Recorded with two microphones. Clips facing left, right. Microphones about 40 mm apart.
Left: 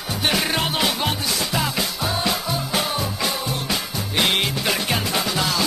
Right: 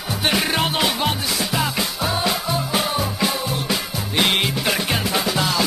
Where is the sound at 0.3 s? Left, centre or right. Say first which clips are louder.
Right 2 dB; centre.